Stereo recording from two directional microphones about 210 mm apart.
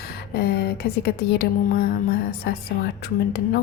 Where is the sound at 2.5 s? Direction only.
50° left (ahead or behind).